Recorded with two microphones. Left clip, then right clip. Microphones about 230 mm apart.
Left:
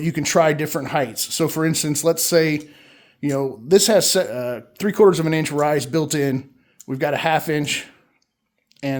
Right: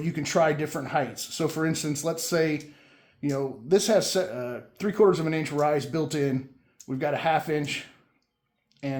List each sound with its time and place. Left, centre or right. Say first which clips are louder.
0.0 s speech: left 7 dB; left